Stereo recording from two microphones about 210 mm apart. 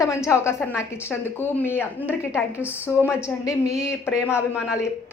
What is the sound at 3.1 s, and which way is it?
Speech, 5° right (ahead or behind).